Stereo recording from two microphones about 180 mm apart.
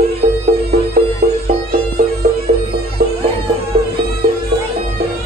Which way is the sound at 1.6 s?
55° right (ahead or behind).